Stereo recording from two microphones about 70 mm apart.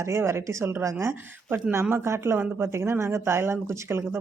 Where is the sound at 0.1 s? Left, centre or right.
Right.